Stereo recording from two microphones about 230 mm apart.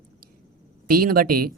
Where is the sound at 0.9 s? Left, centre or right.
Right.